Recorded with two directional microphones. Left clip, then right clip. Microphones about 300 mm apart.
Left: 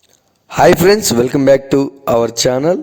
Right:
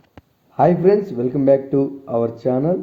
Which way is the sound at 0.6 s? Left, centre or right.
Left.